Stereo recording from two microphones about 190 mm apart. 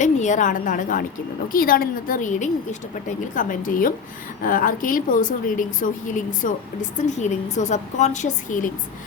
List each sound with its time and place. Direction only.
0.0 s a woman's voice: 40° left (ahead or behind)